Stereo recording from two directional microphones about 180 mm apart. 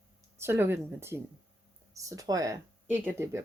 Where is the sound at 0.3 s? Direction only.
15° right (ahead or behind).